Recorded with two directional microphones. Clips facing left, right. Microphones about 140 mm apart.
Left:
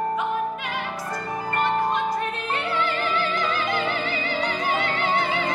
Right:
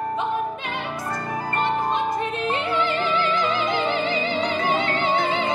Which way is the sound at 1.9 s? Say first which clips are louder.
Right 1 dB; 20° right (ahead or behind).